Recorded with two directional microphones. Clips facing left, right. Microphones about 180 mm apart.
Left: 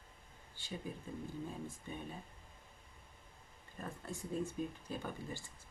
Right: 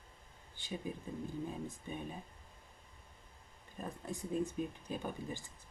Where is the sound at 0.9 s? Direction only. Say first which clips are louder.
Right 4 dB; 15° right (ahead or behind).